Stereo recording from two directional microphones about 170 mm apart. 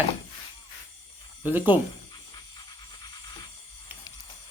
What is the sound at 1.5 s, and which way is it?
Speech, 10° right (ahead or behind).